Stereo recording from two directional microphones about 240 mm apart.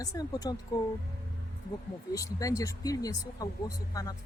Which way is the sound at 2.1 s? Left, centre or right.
Centre.